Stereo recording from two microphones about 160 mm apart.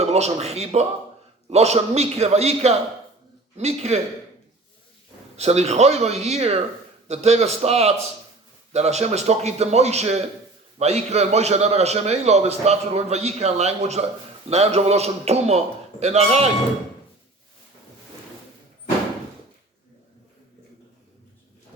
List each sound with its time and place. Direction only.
0.0 s a man's voice: 45° right (ahead or behind)
5.4 s a man's voice: 40° right (ahead or behind)